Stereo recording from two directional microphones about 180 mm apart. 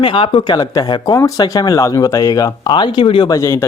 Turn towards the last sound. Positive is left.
turn(degrees=15)  # may be behind; listen again after turning